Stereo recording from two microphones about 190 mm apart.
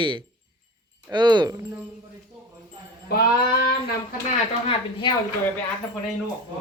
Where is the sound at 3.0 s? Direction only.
55° left (ahead or behind).